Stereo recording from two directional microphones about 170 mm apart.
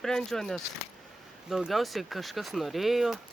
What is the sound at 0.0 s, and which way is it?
Speech, 5° left (ahead or behind).